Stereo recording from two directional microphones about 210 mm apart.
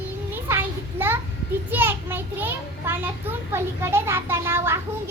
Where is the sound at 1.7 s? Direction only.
10° right (ahead or behind).